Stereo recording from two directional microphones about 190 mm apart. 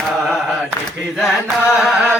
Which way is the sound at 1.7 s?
5° right (ahead or behind).